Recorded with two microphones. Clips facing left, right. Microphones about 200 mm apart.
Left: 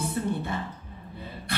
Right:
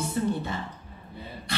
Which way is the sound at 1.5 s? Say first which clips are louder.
Even; 55° left (ahead or behind).